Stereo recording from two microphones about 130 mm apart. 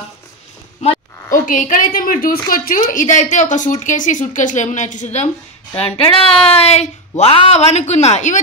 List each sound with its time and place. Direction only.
1.3 s a woman's voice: 85° left; by 5.3 s 65° left (ahead or behind)
5.8 s a woman's voice: 45° left (ahead or behind); by 8.4 s 65° left (ahead or behind)